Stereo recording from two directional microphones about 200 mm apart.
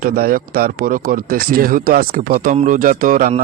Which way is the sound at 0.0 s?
45° right (ahead or behind).